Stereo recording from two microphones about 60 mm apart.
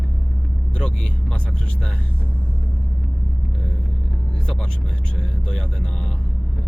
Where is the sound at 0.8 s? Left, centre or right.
Centre.